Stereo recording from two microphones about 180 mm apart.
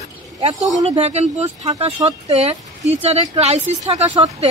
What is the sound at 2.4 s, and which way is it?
Speech, 35° right (ahead or behind).